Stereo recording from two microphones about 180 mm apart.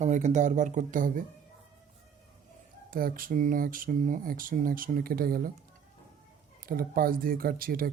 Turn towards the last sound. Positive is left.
turn(degrees=-55)  # may be behind; listen again after turning